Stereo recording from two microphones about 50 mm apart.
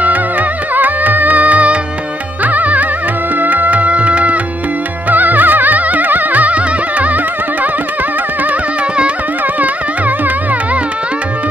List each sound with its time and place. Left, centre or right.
0.0 s music: right